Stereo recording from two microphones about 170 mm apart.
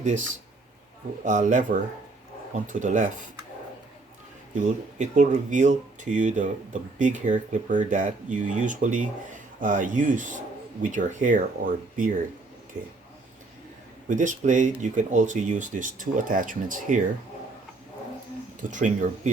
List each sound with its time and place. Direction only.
0.0 s speech: 50° right (ahead or behind)
2.6 s speech: 50° right (ahead or behind)
4.6 s speech: 45° right (ahead or behind)
14.1 s speech: 45° right (ahead or behind)
18.7 s speech: 50° right (ahead or behind)